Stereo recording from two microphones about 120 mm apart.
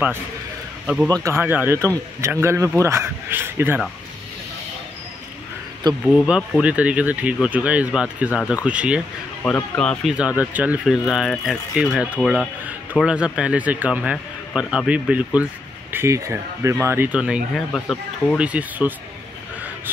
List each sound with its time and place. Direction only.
1.0 s speech: 30° right (ahead or behind)
1.4 s speech: 15° right (ahead or behind)
6.0 s speech: 5° right (ahead or behind)
9.4 s speech: 15° left (ahead or behind)
9.8 s speech: 5° left (ahead or behind)
10.1 s speech: 10° right (ahead or behind)
11.1 s speech: centre (ahead or behind)
15.9 s speech: 25° right (ahead or behind)
17.6 s speech: 5° left (ahead or behind)
18.4 s speech: 10° right (ahead or behind)